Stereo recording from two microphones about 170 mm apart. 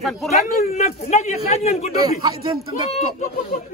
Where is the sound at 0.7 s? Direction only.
40° left (ahead or behind).